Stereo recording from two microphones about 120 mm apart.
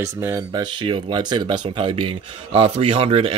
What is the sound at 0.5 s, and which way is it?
Speech, 40° right (ahead or behind).